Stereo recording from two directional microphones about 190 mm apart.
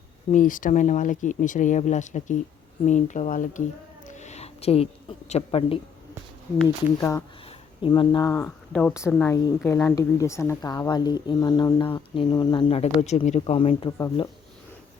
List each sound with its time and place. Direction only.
0.3 s speech: 45° left (ahead or behind)
4.0 s a sound: 40° left (ahead or behind)
7.0 s speech: 10° left (ahead or behind)
7.8 s a woman's voice: 25° left (ahead or behind)